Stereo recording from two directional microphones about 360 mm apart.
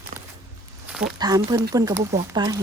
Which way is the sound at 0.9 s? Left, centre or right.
Centre.